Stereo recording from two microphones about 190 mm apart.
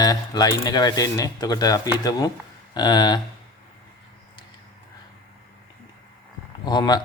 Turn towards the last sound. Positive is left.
turn(degrees=20)  # may be behind; listen again after turning